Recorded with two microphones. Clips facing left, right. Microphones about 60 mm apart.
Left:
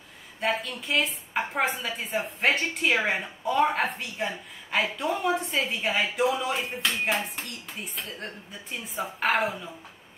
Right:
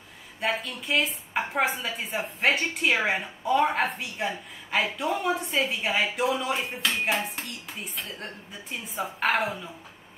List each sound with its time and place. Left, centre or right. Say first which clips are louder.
0.4 s a woman's voice: left 1 dB; centre